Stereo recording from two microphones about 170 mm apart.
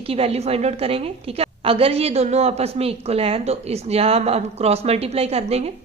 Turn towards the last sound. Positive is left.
turn(degrees=-35)  # may be behind; listen again after turning